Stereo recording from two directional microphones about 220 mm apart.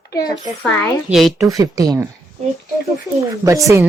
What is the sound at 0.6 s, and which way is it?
Speech, 5° left (ahead or behind).